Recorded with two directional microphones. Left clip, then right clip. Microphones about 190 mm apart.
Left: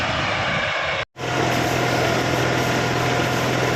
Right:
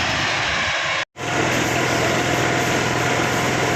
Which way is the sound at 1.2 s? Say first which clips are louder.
Even; 50° right (ahead or behind).